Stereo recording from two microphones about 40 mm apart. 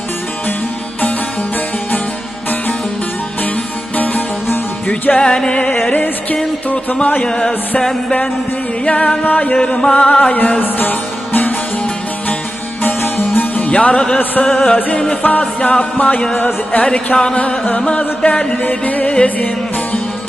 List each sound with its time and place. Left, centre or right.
3.9 s music: left
5.2 s music: centre
5.7 s music: left
6.7 s music: left
7.2 s music: centre
8.8 s music: left
10.6 s music: left
12.8 s music: left
13.6 s music: left
15.2 s music: left
18.6 s music: left